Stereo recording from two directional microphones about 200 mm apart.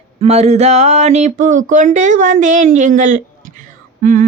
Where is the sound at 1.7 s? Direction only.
40° right (ahead or behind).